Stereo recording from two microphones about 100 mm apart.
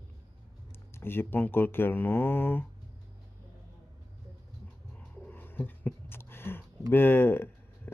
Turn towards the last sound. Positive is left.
turn(degrees=20)  # may be behind; listen again after turning